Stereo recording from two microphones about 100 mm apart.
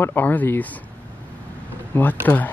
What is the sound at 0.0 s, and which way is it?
Speech, 20° left (ahead or behind).